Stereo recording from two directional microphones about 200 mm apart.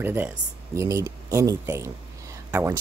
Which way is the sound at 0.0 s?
10° right (ahead or behind).